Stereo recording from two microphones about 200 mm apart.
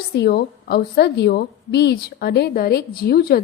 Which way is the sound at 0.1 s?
55° left (ahead or behind).